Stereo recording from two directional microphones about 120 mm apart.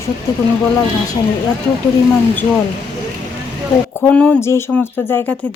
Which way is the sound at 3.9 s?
15° left (ahead or behind).